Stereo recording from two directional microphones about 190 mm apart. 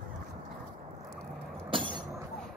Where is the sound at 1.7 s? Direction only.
25° right (ahead or behind).